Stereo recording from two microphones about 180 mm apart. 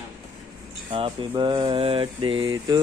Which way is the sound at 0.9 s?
30° right (ahead or behind).